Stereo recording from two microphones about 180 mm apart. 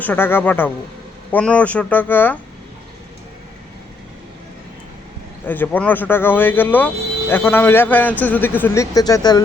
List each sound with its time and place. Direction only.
0.0 s speech: 10° left (ahead or behind)
5.5 s speech: 10° left (ahead or behind)